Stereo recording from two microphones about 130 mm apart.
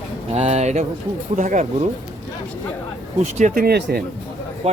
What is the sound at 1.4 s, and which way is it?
Speech, 75° right (ahead or behind).